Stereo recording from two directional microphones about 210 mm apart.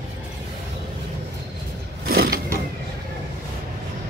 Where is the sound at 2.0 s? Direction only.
45° right (ahead or behind).